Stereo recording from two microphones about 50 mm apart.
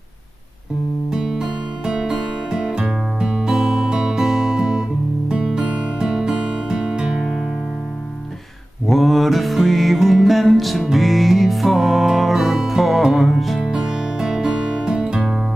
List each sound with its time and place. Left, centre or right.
1.1 s music: centre
8.8 s music: centre
13.6 s music: centre